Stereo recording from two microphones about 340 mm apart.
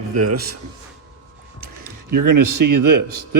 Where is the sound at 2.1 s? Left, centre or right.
Right.